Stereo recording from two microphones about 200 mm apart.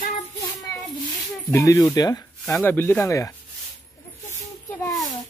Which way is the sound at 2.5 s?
5° left (ahead or behind).